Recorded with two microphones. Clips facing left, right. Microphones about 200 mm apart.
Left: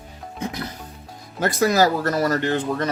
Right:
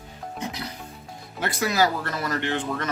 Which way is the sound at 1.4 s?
45° left (ahead or behind).